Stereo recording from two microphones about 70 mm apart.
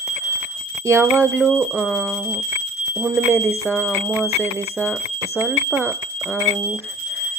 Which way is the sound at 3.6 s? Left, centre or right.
Left.